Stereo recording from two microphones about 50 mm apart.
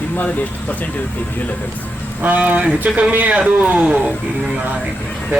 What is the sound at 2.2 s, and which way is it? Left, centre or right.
Speech, right.